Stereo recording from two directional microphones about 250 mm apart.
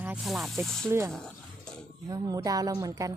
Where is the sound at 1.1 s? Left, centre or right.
Centre.